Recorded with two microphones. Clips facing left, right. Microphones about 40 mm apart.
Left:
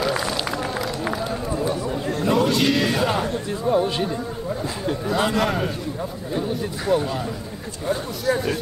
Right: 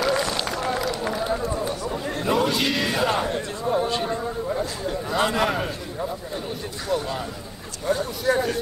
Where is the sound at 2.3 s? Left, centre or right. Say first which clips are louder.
Left 3 dB; centre.